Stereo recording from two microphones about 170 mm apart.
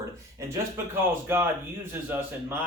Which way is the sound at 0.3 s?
20° right (ahead or behind).